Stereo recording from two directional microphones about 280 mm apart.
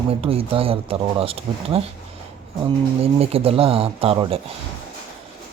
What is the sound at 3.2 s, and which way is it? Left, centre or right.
Mantra, right.